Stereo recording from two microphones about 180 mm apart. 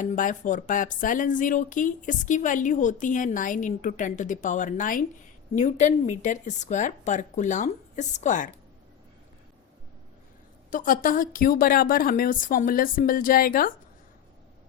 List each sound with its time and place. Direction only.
0.0 s speech: 45° left (ahead or behind)
10.7 s speech: 50° left (ahead or behind)